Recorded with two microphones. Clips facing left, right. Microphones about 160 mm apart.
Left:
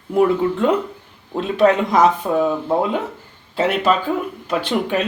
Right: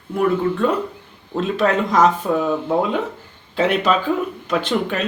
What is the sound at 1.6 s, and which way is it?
Speech, 10° left (ahead or behind).